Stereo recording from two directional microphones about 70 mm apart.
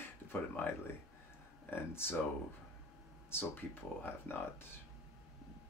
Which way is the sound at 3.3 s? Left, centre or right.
Left.